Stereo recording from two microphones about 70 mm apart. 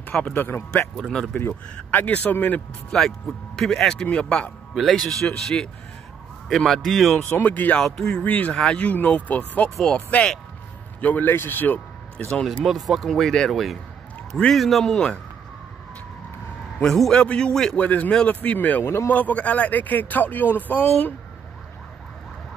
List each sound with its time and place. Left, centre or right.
0.0 s speech: left
0.9 s speech: centre
1.8 s speech: centre
2.9 s speech: centre
4.7 s speech: centre
7.2 s speech: left
12.4 s speech: centre
16.8 s speech: centre
17.1 s speech: centre
17.8 s speech: left